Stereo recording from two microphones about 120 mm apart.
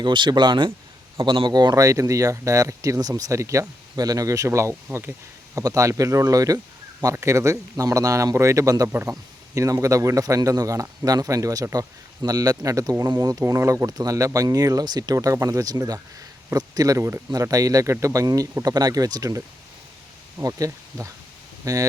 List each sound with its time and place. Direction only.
0.0 s a man's voice: 40° right (ahead or behind)
20.4 s a man's voice: 25° right (ahead or behind)